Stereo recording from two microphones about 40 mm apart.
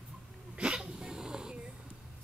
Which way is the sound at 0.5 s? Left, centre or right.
Right.